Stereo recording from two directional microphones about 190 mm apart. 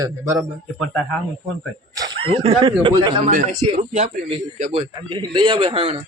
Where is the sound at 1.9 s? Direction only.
25° right (ahead or behind).